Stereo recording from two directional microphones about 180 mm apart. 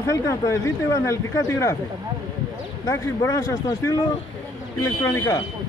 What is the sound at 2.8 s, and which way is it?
Speech, 15° left (ahead or behind).